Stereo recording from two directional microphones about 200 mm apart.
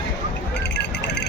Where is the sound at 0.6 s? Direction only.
60° left (ahead or behind).